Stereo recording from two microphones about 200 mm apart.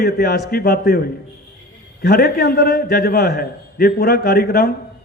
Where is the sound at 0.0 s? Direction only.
50° left (ahead or behind).